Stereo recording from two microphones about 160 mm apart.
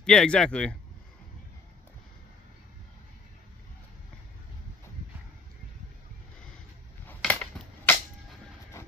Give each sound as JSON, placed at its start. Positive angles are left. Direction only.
{"t": 0.0, "sound": "speech", "side_deg": 5}
{"t": 7.1, "sound": "cap gun", "side_deg": 10}
{"t": 8.8, "sound": "train", "side_deg": 15}